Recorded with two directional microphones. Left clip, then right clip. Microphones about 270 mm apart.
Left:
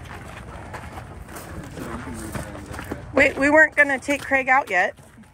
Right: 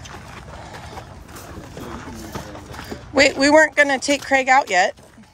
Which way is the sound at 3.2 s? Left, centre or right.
Centre.